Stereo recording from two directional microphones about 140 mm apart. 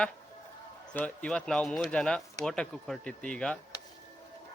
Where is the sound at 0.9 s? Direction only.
10° left (ahead or behind).